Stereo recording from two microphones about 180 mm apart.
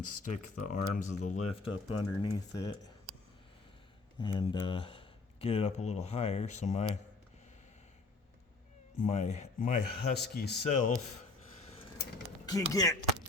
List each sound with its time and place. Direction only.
0.3 s speech: 45° left (ahead or behind)
2.3 s speech: 20° left (ahead or behind)
4.2 s speech: 25° left (ahead or behind)
9.0 s speech: 40° left (ahead or behind); by 10.6 s 65° left (ahead or behind)
10.7 s speech: 45° left (ahead or behind)
12.5 s speech: 20° left (ahead or behind)